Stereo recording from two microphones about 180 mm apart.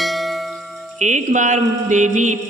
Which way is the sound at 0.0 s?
Centre (ahead or behind).